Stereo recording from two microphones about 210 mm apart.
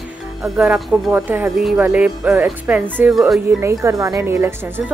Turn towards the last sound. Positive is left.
turn(degrees=-10)  # may be behind; listen again after turning